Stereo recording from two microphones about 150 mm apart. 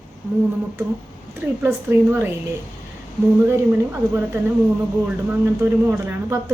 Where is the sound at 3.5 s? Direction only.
15° right (ahead or behind).